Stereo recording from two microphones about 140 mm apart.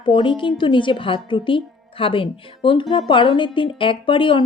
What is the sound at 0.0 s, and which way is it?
Speech, 35° left (ahead or behind).